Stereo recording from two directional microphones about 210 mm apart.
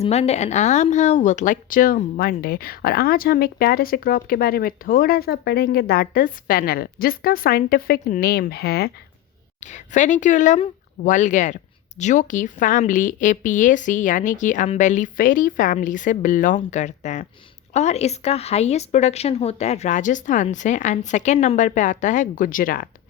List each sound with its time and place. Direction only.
0.0 s speech: 30° left (ahead or behind); by 8.9 s 50° left (ahead or behind)
9.6 s speech: 35° left (ahead or behind)